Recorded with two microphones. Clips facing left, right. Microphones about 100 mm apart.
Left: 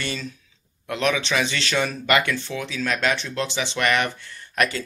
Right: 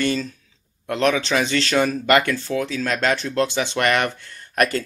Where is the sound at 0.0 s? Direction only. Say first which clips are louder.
Right 8 dB; 45° right (ahead or behind).